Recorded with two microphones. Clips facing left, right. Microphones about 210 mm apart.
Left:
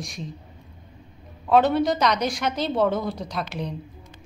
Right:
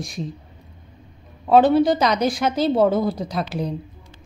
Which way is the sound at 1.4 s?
35° right (ahead or behind).